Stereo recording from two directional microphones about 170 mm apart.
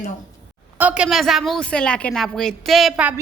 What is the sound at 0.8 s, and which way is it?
A woman's voice, 5° right (ahead or behind).